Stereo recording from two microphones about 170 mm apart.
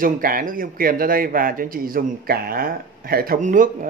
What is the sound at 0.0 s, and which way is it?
Speech, 55° right (ahead or behind).